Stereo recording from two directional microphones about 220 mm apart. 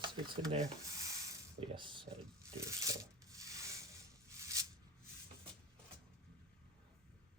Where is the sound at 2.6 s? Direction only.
15° right (ahead or behind).